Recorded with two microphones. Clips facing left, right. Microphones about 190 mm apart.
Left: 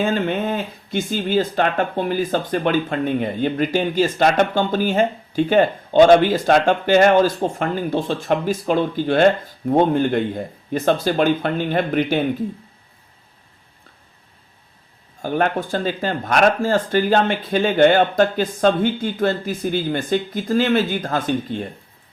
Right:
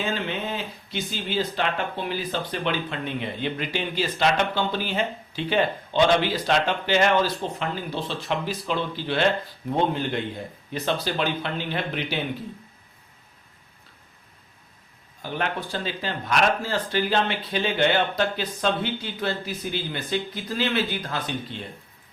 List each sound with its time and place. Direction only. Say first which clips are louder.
0.0 s speech: left 8 dB; 50° left (ahead or behind)
15.2 s speech: left 8 dB; 50° left (ahead or behind)